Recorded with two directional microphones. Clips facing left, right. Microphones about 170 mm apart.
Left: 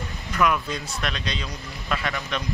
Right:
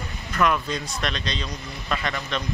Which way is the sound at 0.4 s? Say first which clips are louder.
Even; 5° left (ahead or behind).